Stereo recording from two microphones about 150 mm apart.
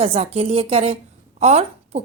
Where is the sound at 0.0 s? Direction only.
40° right (ahead or behind).